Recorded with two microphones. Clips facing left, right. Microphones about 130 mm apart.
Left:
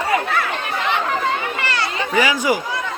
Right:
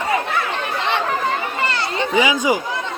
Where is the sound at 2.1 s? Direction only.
20° right (ahead or behind).